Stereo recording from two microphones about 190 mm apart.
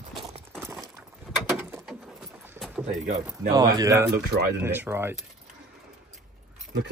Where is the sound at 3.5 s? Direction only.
20° right (ahead or behind).